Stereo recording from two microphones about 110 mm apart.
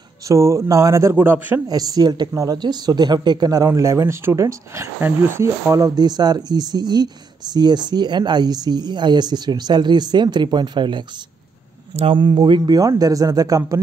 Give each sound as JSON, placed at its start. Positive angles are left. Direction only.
{"t": 0.3, "sound": "a man's voice", "side_deg": -25}
{"t": 1.7, "sound": "speech", "side_deg": -35}
{"t": 11.9, "sound": "speech", "side_deg": -65}
{"t": 12.2, "sound": "speech", "side_deg": -45}